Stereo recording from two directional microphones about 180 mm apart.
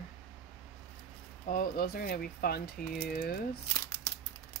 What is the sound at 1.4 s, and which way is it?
Speech, 55° left (ahead or behind).